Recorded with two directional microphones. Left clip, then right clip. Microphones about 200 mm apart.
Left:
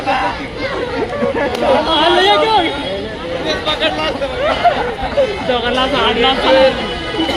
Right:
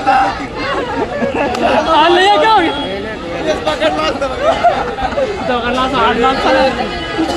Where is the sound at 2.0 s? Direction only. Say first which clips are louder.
Right 2 dB; 55° right (ahead or behind).